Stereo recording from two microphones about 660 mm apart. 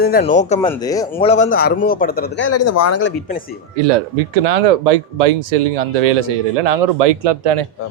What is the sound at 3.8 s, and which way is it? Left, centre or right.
Speech, right.